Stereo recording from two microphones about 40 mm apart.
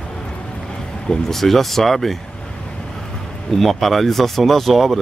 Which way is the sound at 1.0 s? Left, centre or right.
Centre.